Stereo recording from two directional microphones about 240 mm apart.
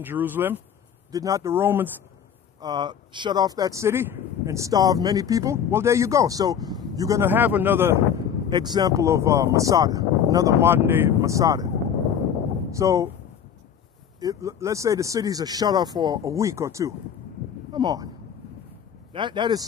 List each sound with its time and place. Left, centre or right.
0.0 s speech: centre
12.7 s speech: centre
14.2 s speech: centre
19.1 s speech: centre